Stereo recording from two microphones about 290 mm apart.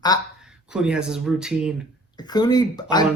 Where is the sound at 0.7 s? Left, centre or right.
Centre.